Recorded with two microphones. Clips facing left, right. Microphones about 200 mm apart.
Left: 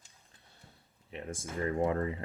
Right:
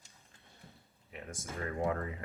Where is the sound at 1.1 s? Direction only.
30° left (ahead or behind).